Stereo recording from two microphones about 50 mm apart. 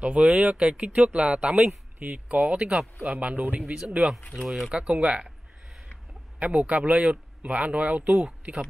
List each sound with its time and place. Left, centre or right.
0.0 s speech: right
3.7 s speech: centre
4.3 s speech: centre
4.6 s speech: right
6.4 s speech: right